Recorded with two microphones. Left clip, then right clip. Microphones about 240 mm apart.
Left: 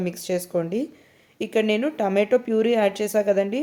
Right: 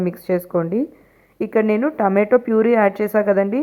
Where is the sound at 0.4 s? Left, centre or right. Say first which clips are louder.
Right 5 dB; centre.